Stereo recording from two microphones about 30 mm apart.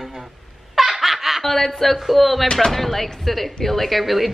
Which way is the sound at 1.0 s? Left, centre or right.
Centre.